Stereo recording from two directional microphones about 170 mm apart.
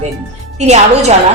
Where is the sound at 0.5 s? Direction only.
40° right (ahead or behind).